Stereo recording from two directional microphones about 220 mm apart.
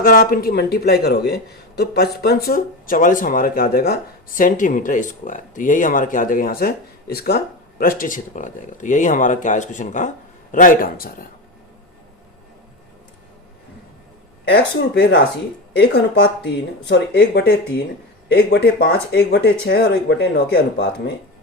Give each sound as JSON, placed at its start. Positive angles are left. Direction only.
{"t": 0.0, "sound": "speech", "side_deg": 40}
{"t": 14.4, "sound": "speech", "side_deg": 50}